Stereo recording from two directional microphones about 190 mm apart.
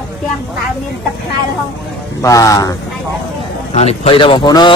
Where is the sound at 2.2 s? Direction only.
15° left (ahead or behind).